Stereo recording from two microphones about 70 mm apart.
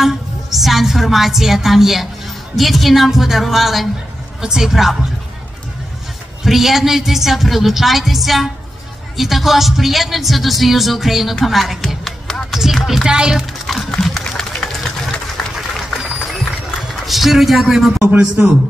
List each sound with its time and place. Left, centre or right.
0.0 s a woman's voice: centre
6.4 s speech: centre
13.7 s run: centre
17.0 s a man's voice: centre
18.4 s a man's voice: right